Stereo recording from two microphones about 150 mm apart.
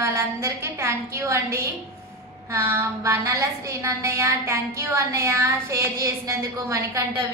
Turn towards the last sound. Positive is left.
turn(degrees=-20)  # may be behind; listen again after turning